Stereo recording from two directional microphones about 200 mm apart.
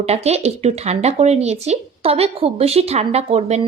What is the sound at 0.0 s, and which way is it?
Speech, 30° right (ahead or behind).